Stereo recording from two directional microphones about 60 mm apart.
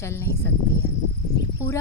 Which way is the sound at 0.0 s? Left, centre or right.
Left.